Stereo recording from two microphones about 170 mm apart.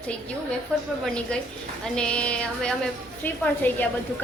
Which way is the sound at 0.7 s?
5° left (ahead or behind).